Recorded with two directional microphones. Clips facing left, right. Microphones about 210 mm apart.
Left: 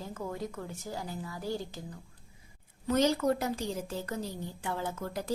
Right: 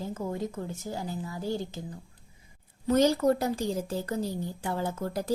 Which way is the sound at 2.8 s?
35° right (ahead or behind).